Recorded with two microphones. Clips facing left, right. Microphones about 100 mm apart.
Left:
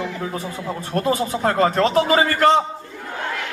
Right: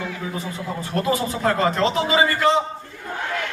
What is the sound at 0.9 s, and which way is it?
Speech, 40° left (ahead or behind).